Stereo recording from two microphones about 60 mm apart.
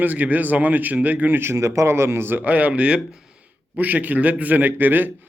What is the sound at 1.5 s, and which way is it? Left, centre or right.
A man's voice, right.